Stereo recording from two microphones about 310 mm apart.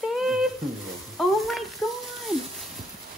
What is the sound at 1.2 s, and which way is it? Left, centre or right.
Stir, centre.